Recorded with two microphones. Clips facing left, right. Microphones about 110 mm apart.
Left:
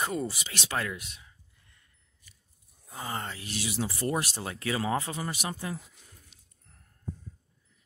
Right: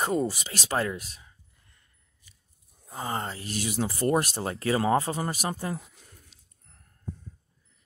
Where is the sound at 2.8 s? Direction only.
35° right (ahead or behind).